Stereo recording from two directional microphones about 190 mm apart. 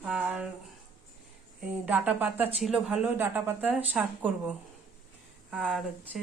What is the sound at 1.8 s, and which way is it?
Speech, 5° right (ahead or behind).